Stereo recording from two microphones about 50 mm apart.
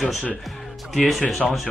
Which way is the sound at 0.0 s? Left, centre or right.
Centre.